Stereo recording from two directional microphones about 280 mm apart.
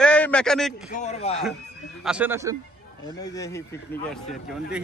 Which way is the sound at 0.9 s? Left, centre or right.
Left.